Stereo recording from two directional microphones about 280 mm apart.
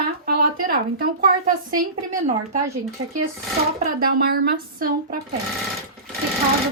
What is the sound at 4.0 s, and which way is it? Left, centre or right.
A woman's voice, right.